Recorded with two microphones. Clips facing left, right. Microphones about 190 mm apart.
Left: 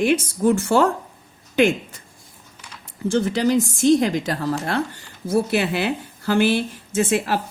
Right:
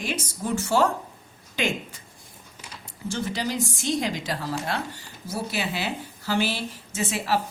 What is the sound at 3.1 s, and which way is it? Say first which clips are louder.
A woman's voice: left 10 dB; 50° left (ahead or behind).